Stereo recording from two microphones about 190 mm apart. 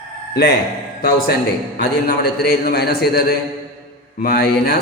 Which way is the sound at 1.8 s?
55° left (ahead or behind).